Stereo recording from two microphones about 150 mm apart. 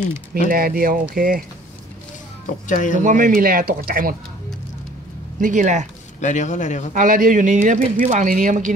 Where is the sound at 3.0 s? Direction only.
60° right (ahead or behind).